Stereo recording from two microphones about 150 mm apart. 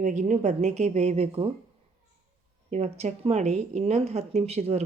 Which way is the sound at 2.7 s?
50° right (ahead or behind).